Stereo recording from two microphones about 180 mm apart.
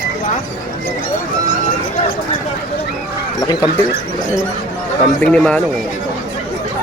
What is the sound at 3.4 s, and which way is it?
Speech, 25° left (ahead or behind).